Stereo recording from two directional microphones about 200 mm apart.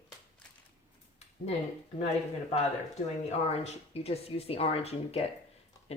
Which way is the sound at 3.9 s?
30° left (ahead or behind).